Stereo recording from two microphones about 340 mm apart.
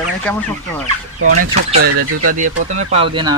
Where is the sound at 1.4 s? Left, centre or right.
Right.